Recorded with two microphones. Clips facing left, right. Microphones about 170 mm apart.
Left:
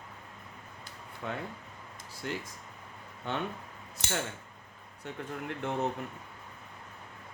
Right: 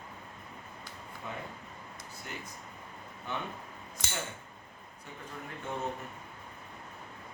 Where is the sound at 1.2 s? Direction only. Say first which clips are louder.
Left 5 dB; 70° left (ahead or behind).